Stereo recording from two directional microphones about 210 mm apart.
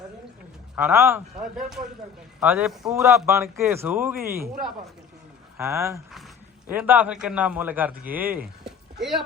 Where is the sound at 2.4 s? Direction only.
5° right (ahead or behind).